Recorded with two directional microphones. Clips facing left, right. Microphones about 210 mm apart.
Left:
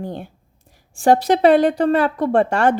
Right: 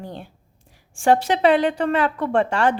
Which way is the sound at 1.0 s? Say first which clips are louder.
Left 3 dB; 40° left (ahead or behind).